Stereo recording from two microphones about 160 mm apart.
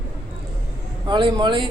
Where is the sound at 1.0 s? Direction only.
30° right (ahead or behind).